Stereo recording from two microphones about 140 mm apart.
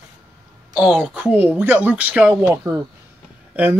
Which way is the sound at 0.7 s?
5° right (ahead or behind).